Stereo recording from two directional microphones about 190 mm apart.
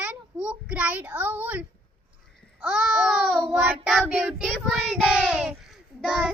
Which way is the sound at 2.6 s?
5° right (ahead or behind).